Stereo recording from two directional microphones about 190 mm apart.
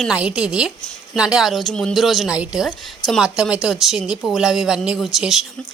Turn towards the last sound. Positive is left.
turn(degrees=0)  # may be behind; listen again after turning